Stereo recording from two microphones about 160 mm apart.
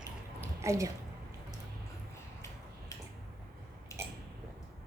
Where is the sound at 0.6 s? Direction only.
20° right (ahead or behind).